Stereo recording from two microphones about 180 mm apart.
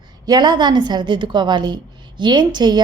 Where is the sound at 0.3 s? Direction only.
25° right (ahead or behind).